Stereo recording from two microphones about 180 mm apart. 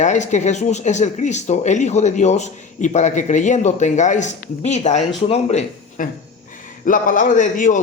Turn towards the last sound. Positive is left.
turn(degrees=45)  # may be behind; listen again after turning